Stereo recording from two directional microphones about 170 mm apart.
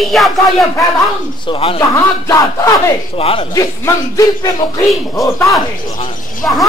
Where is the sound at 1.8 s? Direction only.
20° left (ahead or behind).